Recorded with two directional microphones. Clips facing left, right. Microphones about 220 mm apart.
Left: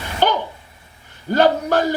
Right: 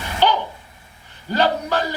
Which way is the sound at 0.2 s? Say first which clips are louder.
Even; 50° left (ahead or behind).